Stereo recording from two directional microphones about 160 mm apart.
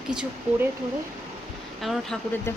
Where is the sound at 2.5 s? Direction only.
15° left (ahead or behind).